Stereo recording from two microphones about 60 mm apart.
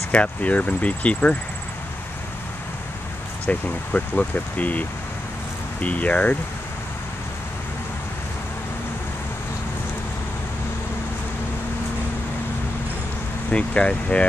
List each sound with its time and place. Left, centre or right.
0.1 s speech: left
3.4 s speech: left
13.5 s speech: centre